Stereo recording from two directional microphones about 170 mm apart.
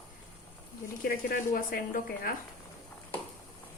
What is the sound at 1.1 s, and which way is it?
Speech, 55° left (ahead or behind).